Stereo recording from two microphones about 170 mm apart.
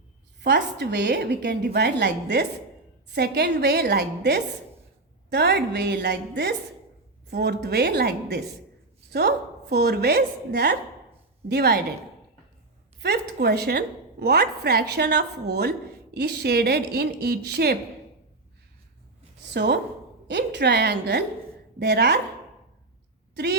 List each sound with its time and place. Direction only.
0.3 s a woman's voice: 85° right
13.0 s a woman's voice: 70° right (ahead or behind)
19.5 s a woman's voice: 80° right
23.3 s speech: 80° right